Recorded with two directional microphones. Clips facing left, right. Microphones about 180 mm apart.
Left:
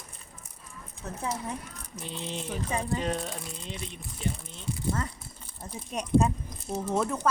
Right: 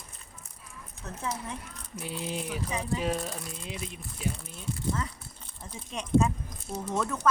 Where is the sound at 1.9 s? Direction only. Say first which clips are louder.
Right 2 dB; 10° right (ahead or behind).